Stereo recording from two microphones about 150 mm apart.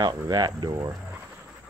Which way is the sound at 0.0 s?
30° right (ahead or behind).